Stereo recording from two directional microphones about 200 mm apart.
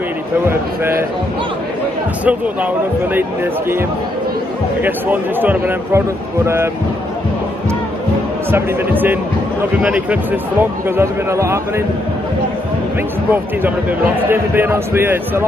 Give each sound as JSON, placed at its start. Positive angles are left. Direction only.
{"t": 0.5, "sound": "speech", "side_deg": -10}
{"t": 2.2, "sound": "speech", "side_deg": -10}
{"t": 4.8, "sound": "speech", "side_deg": -10}
{"t": 8.5, "sound": "speech", "side_deg": -10}
{"t": 13.3, "sound": "speech", "side_deg": -10}